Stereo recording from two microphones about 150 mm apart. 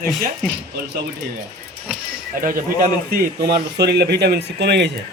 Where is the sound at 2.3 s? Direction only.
65° right (ahead or behind); by 4.7 s 90° right.